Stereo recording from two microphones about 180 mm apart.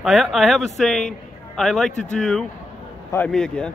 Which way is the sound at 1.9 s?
40° left (ahead or behind).